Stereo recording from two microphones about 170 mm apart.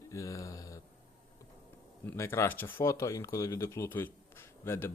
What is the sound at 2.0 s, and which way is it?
Speech, 15° left (ahead or behind).